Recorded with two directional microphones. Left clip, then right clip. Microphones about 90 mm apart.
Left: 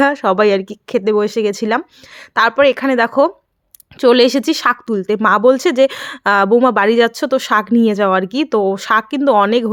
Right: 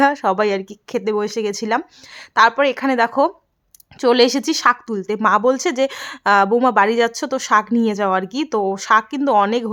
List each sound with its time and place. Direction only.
0.0 s speech: 30° left (ahead or behind)